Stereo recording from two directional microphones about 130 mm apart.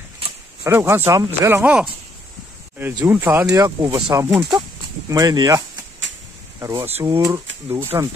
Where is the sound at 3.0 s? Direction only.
15° right (ahead or behind).